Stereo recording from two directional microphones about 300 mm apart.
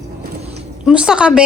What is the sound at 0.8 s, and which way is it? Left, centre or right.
Speech, centre.